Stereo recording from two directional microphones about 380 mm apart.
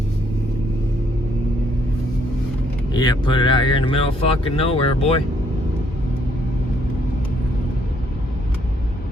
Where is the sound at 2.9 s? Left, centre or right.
Centre.